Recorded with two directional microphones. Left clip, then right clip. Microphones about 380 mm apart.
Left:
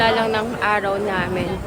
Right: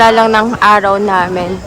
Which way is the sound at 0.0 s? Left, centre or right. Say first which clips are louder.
Right 11 dB; centre.